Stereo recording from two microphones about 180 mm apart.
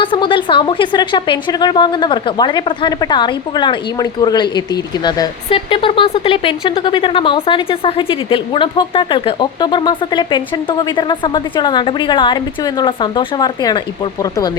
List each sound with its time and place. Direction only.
0.0 s a woman's voice: 30° left (ahead or behind)